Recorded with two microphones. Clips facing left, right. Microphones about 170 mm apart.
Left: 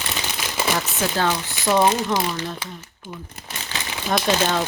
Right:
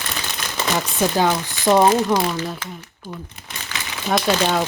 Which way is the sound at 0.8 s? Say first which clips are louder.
Right 4 dB; 15° right (ahead or behind).